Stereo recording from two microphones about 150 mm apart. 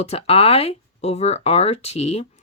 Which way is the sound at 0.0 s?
40° left (ahead or behind).